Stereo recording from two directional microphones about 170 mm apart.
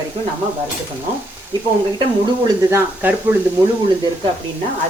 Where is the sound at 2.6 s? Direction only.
15° right (ahead or behind).